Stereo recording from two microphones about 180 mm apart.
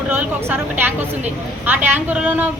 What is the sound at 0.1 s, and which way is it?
Speech, 10° right (ahead or behind).